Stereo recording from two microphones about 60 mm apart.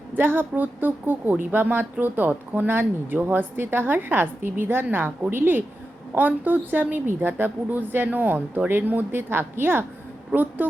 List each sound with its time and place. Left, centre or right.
0.1 s a woman's voice: right